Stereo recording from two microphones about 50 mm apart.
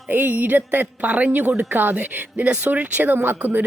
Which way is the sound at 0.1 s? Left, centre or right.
Right.